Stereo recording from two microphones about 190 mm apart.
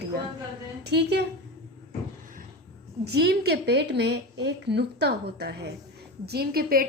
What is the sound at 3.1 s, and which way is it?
A woman's voice, 60° right (ahead or behind).